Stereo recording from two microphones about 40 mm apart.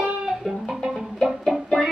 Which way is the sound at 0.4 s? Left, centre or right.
Centre.